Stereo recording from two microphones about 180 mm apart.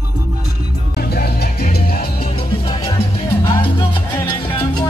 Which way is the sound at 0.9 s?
60° left (ahead or behind).